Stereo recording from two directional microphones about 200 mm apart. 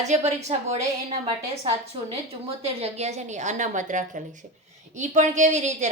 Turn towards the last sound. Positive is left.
turn(degrees=-35)  # may be behind; listen again after turning